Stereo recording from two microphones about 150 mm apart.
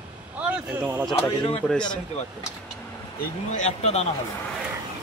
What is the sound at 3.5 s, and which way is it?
Speech, 50° left (ahead or behind).